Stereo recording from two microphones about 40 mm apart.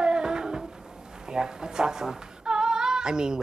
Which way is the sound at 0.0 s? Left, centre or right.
Centre.